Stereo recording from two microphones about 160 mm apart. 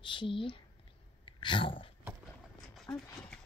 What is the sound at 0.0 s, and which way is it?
Speech, 30° left (ahead or behind).